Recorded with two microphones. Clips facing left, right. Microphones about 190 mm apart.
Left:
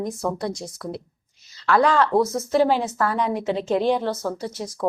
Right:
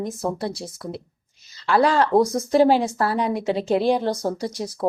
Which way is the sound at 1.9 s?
40° right (ahead or behind).